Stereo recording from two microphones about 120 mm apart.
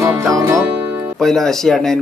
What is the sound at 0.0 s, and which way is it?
Music, 25° right (ahead or behind).